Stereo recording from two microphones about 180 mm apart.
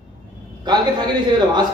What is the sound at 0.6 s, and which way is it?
A man's voice, 25° right (ahead or behind).